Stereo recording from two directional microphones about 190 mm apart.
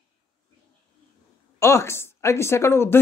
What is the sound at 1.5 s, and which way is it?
Speech, 15° left (ahead or behind).